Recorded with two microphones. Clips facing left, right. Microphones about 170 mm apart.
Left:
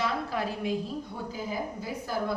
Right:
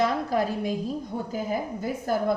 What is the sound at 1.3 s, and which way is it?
A woman's voice, 50° right (ahead or behind).